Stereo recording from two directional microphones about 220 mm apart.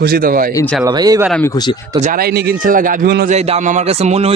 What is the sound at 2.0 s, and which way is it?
Speech, 35° right (ahead or behind).